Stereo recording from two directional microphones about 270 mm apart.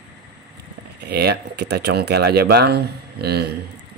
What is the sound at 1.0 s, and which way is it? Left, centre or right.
Speech, right.